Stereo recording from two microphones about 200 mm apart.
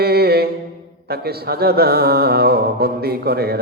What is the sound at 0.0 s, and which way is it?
Mantra, 50° right (ahead or behind).